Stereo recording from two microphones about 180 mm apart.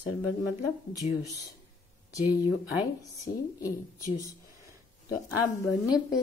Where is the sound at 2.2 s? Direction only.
15° right (ahead or behind).